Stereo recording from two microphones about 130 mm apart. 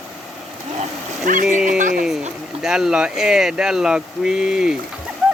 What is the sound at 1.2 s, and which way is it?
Speech, 85° right.